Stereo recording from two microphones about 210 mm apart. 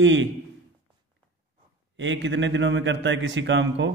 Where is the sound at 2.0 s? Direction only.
60° right (ahead or behind).